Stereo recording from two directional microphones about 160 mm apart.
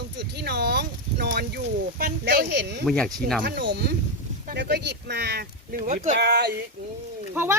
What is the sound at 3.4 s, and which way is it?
Speech, 90° right.